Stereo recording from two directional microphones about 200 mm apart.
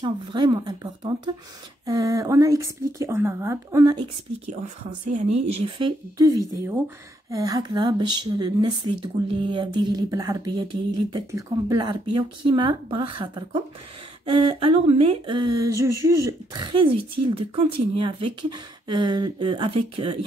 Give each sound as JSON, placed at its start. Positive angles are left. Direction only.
{"t": 0.0, "sound": "speech", "side_deg": -20}
{"t": 5.1, "sound": "speech", "side_deg": -30}